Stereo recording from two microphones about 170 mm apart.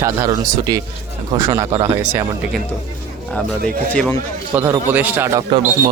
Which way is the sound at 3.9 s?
10° left (ahead or behind).